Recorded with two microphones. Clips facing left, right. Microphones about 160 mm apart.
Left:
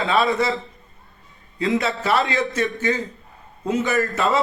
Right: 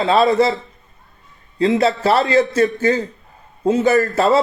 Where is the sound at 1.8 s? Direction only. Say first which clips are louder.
Right 6 dB; 35° right (ahead or behind).